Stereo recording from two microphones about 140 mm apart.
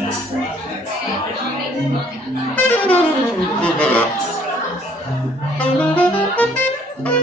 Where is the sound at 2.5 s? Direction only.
10° left (ahead or behind).